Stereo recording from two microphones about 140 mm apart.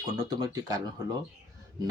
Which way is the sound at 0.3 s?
25° right (ahead or behind).